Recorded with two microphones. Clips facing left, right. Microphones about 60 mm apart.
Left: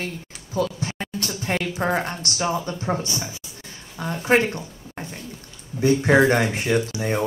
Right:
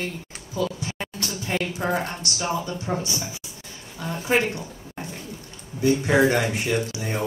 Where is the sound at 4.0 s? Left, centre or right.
Left.